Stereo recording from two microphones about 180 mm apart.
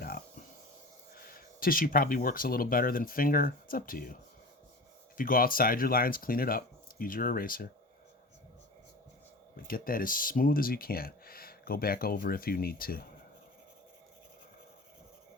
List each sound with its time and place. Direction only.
1.1 s speech: 55° left (ahead or behind)
9.6 s speech: 50° left (ahead or behind)